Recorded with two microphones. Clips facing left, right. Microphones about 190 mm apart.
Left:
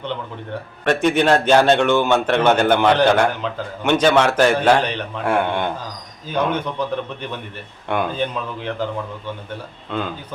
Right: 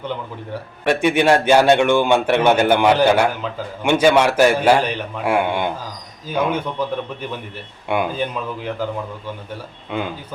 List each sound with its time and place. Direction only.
0.9 s a man's voice: 10° right (ahead or behind)
9.9 s a man's voice: 10° right (ahead or behind)